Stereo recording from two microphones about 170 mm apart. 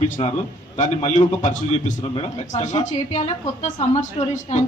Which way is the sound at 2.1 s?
30° left (ahead or behind).